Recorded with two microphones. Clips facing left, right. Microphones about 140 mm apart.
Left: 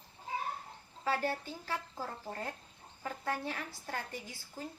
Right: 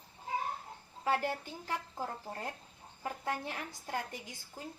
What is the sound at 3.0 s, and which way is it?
Speech, 15° right (ahead or behind).